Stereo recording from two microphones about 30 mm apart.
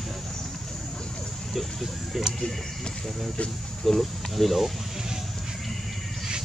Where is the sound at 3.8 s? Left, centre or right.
Centre.